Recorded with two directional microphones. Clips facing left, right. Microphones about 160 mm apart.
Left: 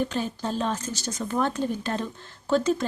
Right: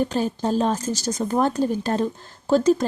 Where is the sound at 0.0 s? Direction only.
40° right (ahead or behind).